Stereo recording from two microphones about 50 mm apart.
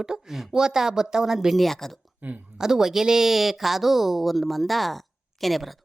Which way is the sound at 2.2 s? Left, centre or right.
Right.